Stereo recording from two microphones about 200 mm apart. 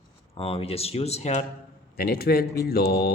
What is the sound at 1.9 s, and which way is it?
Speech, 50° left (ahead or behind).